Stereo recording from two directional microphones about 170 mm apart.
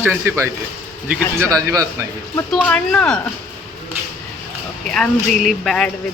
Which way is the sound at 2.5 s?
5° left (ahead or behind).